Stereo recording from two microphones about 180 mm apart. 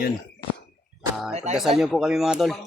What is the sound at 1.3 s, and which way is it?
Speech, 40° right (ahead or behind).